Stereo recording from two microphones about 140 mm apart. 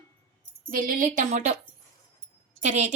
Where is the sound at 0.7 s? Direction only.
90° right; by 1.6 s 55° right (ahead or behind).